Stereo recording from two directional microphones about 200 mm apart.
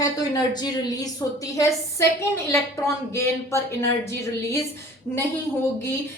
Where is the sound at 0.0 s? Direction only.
20° left (ahead or behind).